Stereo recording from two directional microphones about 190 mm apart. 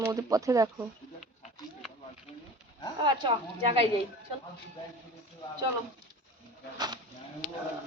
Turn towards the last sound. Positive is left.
turn(degrees=-20)  # may be behind; listen again after turning